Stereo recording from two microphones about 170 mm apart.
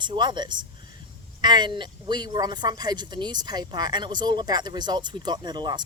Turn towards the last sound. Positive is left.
turn(degrees=-25)  # may be behind; listen again after turning